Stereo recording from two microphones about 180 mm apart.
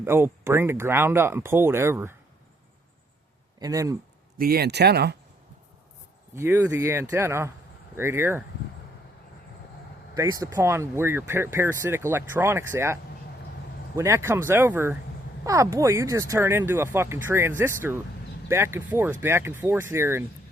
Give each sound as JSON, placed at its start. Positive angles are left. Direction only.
{"t": 0.0, "sound": "speech", "side_deg": -15}
{"t": 3.6, "sound": "speech", "side_deg": -20}
{"t": 4.4, "sound": "speech", "side_deg": -55}
{"t": 6.3, "sound": "speech", "side_deg": -15}
{"t": 10.2, "sound": "speech", "side_deg": -20}